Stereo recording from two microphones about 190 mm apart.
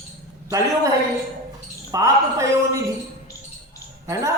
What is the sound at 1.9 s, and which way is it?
Speech, 15° right (ahead or behind).